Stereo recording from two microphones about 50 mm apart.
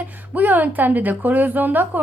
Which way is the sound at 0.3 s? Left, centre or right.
Right.